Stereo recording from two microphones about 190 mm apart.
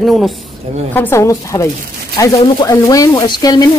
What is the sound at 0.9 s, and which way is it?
Speech, 15° left (ahead or behind).